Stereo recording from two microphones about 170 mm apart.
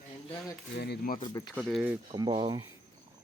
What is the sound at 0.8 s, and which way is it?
Speech, 65° left (ahead or behind).